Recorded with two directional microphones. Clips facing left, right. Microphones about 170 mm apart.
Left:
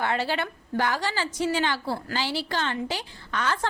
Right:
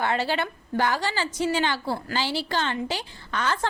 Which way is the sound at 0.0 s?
30° right (ahead or behind).